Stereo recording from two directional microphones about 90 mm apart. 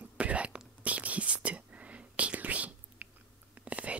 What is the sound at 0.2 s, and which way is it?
Whispering, 15° right (ahead or behind).